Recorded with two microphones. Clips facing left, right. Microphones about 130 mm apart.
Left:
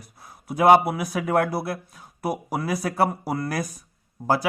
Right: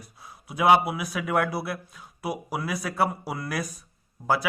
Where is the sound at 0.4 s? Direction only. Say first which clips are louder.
Left 4 dB; 45° left (ahead or behind).